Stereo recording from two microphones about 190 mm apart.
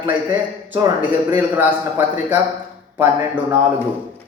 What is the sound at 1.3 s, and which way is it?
A man's voice, 10° right (ahead or behind).